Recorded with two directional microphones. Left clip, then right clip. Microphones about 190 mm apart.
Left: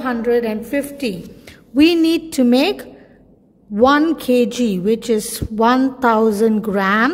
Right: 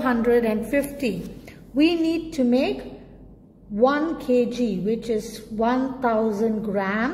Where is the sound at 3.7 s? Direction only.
40° left (ahead or behind).